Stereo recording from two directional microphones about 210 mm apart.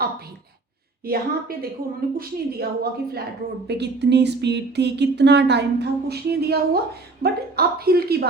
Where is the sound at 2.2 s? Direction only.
45° right (ahead or behind).